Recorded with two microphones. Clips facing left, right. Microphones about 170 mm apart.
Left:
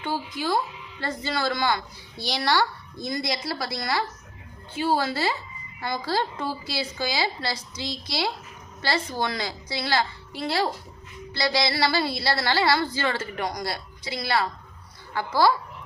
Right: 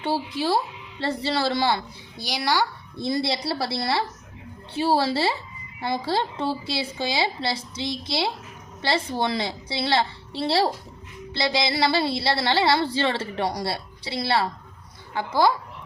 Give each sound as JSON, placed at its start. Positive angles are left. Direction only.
{"t": 0.3, "sound": "a woman's voice", "side_deg": -30}
{"t": 2.1, "sound": "a child's voice", "side_deg": -15}
{"t": 3.0, "sound": "a woman's voice", "side_deg": -30}